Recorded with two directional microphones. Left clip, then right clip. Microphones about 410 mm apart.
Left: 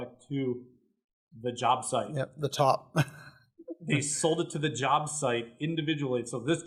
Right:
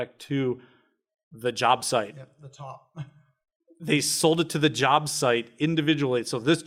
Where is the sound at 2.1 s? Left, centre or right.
Left.